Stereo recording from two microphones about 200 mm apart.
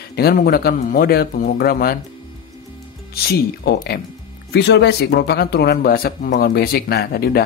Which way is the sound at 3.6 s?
50° left (ahead or behind).